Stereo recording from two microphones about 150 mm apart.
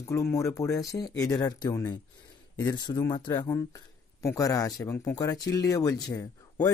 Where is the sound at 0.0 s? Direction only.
20° left (ahead or behind).